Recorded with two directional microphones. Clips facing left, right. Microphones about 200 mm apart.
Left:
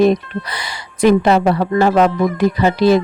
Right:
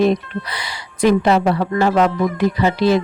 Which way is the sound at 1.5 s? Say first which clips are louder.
Left 3 dB; 40° left (ahead or behind).